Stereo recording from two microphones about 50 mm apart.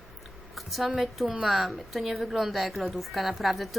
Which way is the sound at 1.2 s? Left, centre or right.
Centre.